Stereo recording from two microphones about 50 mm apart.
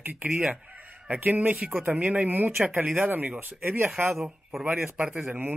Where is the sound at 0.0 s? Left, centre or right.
Right.